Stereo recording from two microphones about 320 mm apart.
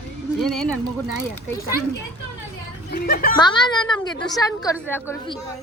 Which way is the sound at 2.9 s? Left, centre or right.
Left.